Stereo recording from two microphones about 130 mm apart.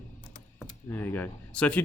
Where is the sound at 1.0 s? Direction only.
15° left (ahead or behind).